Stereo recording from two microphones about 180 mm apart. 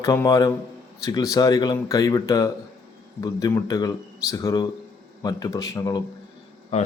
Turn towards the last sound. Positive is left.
turn(degrees=35)  # may be behind; listen again after turning